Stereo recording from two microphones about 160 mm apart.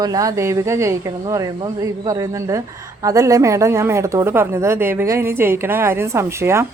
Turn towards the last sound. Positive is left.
turn(degrees=-15)  # may be behind; listen again after turning